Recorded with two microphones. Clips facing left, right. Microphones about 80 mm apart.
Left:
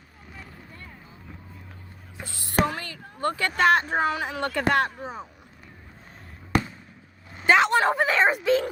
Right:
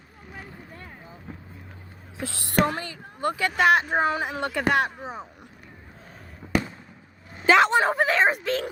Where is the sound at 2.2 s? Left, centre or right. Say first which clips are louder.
Right 7 dB; right.